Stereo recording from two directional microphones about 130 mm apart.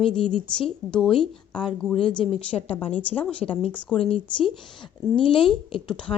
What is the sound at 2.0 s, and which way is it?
A woman's voice, 40° left (ahead or behind).